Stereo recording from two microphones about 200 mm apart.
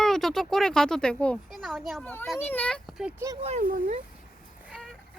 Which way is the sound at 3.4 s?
40° right (ahead or behind).